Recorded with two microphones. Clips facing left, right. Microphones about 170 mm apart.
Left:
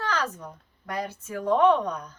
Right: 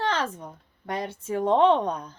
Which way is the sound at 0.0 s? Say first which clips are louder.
Right 2 dB; 25° right (ahead or behind).